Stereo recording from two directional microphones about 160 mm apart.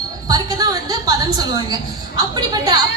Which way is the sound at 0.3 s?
25° right (ahead or behind).